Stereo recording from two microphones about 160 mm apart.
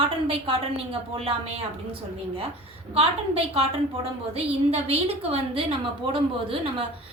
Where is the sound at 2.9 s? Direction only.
35° right (ahead or behind).